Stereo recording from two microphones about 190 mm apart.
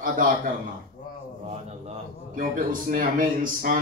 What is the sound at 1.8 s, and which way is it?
A man's voice, 45° right (ahead or behind).